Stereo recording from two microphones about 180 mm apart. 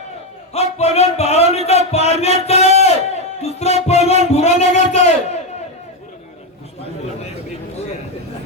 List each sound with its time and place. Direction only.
0.5 s speech: 35° left (ahead or behind)
2.5 s a sound: 35° left (ahead or behind)
3.4 s music: 35° left (ahead or behind)